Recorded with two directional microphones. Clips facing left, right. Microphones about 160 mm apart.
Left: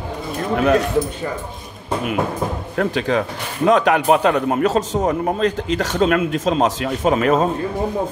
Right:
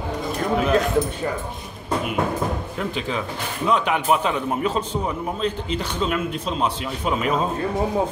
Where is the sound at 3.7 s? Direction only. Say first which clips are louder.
Left 6 dB; 90° left; by 7.5 s 70° left (ahead or behind).